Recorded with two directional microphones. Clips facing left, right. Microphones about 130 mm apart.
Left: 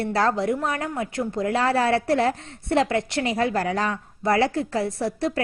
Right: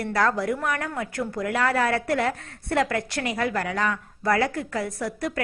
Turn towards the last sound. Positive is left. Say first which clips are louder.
# left 4 dB
turn(degrees=30)  # may be behind; listen again after turning